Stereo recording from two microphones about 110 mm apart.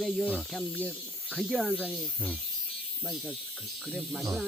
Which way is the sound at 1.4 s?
5° right (ahead or behind).